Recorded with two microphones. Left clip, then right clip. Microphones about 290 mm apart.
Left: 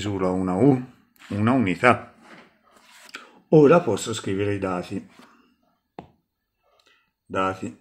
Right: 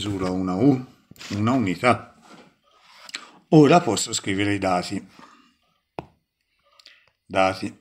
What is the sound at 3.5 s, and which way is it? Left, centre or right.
Speech, centre.